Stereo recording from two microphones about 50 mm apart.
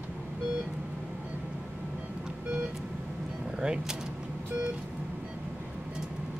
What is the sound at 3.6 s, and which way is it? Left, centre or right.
Speech, centre.